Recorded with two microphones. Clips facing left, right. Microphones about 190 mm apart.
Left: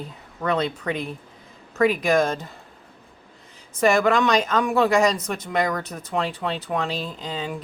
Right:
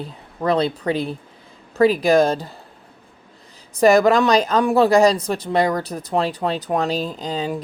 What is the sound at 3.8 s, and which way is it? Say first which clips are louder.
Speech: right 5 dB; 35° right (ahead or behind).